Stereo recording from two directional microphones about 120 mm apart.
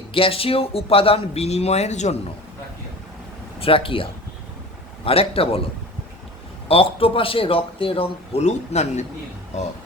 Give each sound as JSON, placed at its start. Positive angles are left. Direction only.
{"t": 0.1, "sound": "speech", "side_deg": 50}
{"t": 3.6, "sound": "speech", "side_deg": 50}
{"t": 6.7, "sound": "speech", "side_deg": 50}